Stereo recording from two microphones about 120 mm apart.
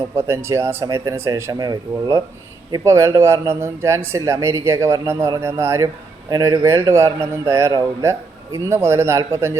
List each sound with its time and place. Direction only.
0.2 s speech: 20° right (ahead or behind)